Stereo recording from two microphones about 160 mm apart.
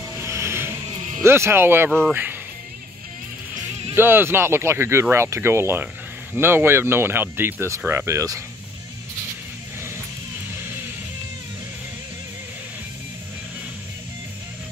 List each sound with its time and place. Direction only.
0.2 s music: 15° right (ahead or behind)
0.8 s music: 45° right (ahead or behind)
1.2 s speech: 15° right (ahead or behind)
1.9 s speech: centre (ahead or behind)
3.9 s speech: 15° right (ahead or behind)
9.8 s vehicle: 15° right (ahead or behind)